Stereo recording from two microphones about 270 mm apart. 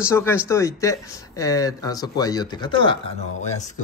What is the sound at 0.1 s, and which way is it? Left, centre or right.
A man's voice, centre.